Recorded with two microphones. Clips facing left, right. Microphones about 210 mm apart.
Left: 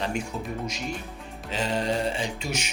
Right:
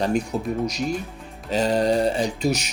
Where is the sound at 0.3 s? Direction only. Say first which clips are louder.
Right 8 dB; 40° right (ahead or behind).